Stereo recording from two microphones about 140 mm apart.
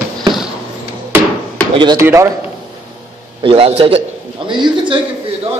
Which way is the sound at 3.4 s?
40° right (ahead or behind).